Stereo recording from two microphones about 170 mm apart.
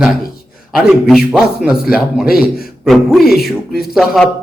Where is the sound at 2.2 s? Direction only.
60° left (ahead or behind).